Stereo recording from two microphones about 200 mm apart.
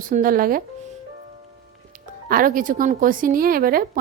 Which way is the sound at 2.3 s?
45° right (ahead or behind).